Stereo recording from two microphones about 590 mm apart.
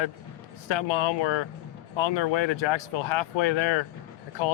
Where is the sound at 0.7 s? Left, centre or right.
Left.